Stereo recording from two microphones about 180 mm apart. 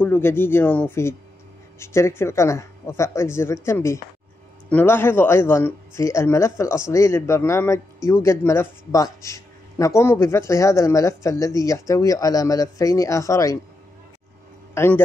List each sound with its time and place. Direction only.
0.0 s speech: 10° left (ahead or behind)
14.7 s a man's voice: 15° left (ahead or behind)